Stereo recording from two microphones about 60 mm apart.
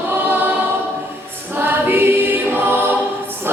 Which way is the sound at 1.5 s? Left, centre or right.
Right.